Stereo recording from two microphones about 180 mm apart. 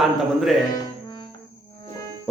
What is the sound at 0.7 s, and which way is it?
Music, 20° left (ahead or behind).